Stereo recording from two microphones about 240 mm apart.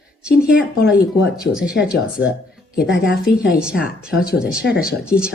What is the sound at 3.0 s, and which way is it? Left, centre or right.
Speech, centre.